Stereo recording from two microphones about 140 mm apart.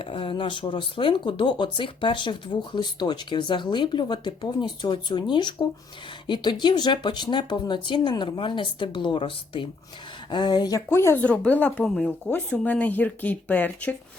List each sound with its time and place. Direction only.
0.0 s speech: 40° left (ahead or behind); by 13.9 s 10° left (ahead or behind)